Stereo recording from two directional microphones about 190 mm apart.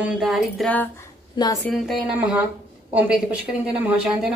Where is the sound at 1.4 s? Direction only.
20° left (ahead or behind).